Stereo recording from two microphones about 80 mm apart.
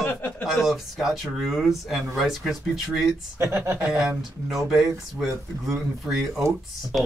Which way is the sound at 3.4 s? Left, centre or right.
Right.